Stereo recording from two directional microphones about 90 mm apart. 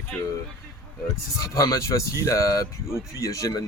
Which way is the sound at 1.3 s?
40° left (ahead or behind).